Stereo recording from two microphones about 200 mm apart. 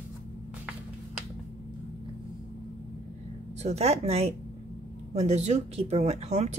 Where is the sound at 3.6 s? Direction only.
30° right (ahead or behind).